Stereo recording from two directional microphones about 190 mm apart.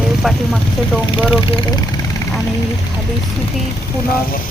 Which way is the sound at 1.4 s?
25° left (ahead or behind).